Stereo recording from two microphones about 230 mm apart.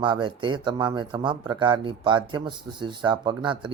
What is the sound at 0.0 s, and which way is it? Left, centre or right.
Speech, right.